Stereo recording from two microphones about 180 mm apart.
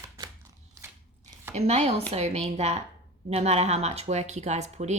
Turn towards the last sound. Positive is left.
turn(degrees=-40)  # may be behind; listen again after turning